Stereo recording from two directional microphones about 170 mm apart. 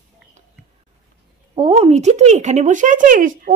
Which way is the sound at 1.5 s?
35° right (ahead or behind).